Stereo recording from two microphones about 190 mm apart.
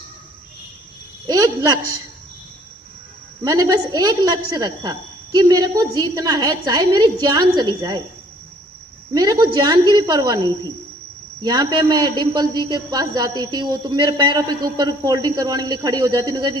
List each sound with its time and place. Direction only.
1.3 s a man's voice: 20° right (ahead or behind)
3.4 s a man's voice: 20° right (ahead or behind)
9.1 s a man's voice: 20° right (ahead or behind)